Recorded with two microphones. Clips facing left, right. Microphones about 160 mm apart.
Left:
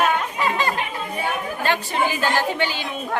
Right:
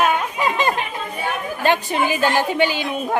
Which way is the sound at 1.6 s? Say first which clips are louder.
Right 4 dB; 15° right (ahead or behind).